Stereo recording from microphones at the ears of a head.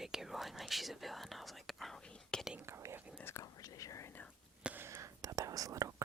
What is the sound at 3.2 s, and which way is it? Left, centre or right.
Whispering, left.